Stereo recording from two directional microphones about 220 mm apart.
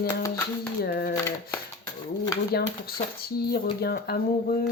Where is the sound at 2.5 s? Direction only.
45° left (ahead or behind).